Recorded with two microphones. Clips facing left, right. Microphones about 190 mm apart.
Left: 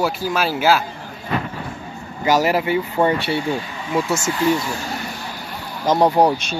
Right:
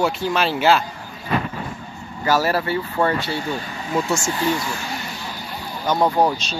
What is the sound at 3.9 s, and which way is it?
Speech, 5° left (ahead or behind).